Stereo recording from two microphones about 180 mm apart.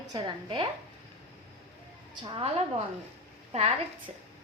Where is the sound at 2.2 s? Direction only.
30° right (ahead or behind).